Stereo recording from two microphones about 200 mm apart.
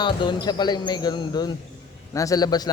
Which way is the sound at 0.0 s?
20° left (ahead or behind).